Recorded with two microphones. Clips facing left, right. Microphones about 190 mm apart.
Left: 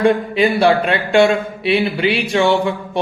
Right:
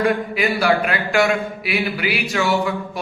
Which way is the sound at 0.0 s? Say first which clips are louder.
Left 5 dB; 25° left (ahead or behind).